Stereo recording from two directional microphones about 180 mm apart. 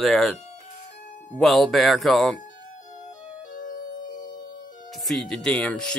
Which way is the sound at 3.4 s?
50° left (ahead or behind).